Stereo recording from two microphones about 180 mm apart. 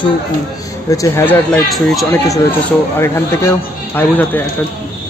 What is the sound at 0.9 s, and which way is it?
Speech, 15° left (ahead or behind).